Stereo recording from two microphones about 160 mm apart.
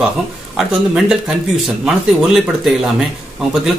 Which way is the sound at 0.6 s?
Centre (ahead or behind).